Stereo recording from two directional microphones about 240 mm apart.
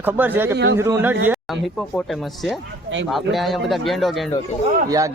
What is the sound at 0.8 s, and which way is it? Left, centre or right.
Speech, centre.